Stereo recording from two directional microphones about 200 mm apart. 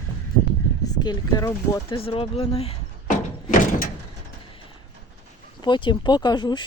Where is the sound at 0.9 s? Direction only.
20° left (ahead or behind).